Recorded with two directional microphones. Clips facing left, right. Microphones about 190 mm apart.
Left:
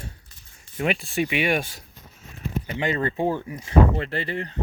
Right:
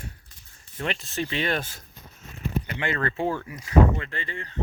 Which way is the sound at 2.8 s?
20° left (ahead or behind).